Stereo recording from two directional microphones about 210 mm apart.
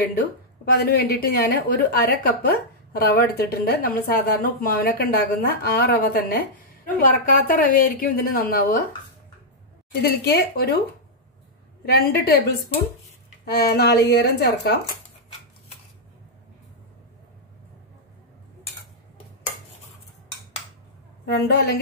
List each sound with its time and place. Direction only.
0.7 s a woman's voice: 45° left (ahead or behind)
10.0 s a woman's voice: 50° left (ahead or behind)
11.8 s a woman's voice: 50° left (ahead or behind)
13.5 s a woman's voice: 50° left (ahead or behind)
21.3 s a woman's voice: 50° left (ahead or behind)